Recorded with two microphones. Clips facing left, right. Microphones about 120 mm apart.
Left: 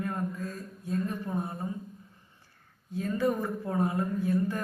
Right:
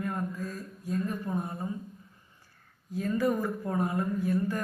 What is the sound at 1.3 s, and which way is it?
Speech, 25° left (ahead or behind).